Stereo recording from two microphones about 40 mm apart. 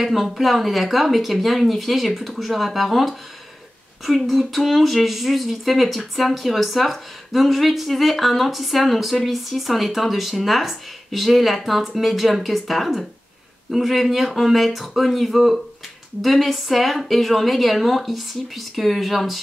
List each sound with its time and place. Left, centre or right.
0.0 s speech: centre